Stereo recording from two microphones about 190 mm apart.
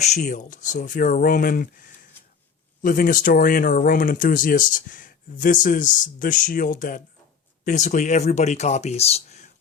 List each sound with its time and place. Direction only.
0.0 s speech: 35° left (ahead or behind)